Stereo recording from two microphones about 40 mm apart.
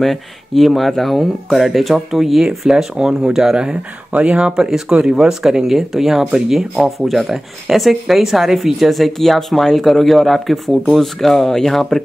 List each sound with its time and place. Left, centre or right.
0.0 s speech: centre
4.1 s speech: right
4.6 s speech: centre